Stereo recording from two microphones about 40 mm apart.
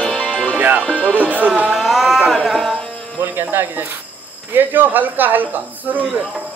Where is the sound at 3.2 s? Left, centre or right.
Right.